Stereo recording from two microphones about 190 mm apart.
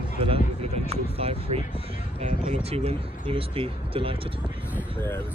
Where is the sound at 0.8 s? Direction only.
30° right (ahead or behind).